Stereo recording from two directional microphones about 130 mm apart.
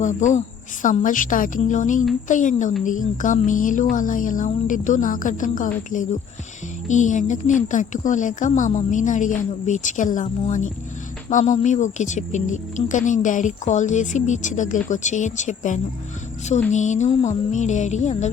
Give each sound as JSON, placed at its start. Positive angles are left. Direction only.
{"t": 0.0, "sound": "speech", "side_deg": 70}
{"t": 6.8, "sound": "speech", "side_deg": 70}
{"t": 10.4, "sound": "speech", "side_deg": 70}
{"t": 16.5, "sound": "music", "side_deg": 65}